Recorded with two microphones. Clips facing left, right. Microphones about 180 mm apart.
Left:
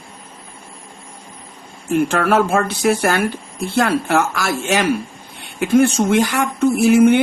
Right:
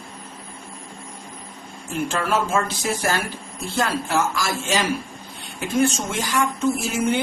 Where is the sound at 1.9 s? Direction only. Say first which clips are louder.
Left 7 dB; 60° left (ahead or behind).